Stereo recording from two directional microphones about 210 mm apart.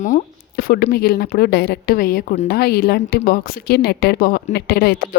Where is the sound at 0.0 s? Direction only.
40° left (ahead or behind).